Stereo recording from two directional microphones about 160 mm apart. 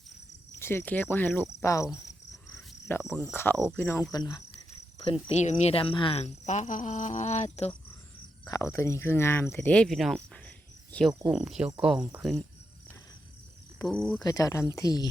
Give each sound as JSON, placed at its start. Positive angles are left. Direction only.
{"t": 0.6, "sound": "speech", "side_deg": 15}
{"t": 2.9, "sound": "speech", "side_deg": 15}
{"t": 5.3, "sound": "speech", "side_deg": 45}
{"t": 8.4, "sound": "speech", "side_deg": 20}
{"t": 13.8, "sound": "speech", "side_deg": 5}
{"t": 14.2, "sound": "speech", "side_deg": 20}